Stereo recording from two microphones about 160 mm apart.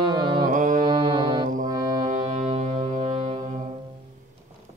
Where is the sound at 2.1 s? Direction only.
45° right (ahead or behind).